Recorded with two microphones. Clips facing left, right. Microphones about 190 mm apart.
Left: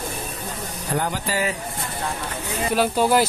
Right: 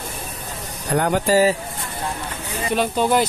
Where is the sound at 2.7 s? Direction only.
5° left (ahead or behind).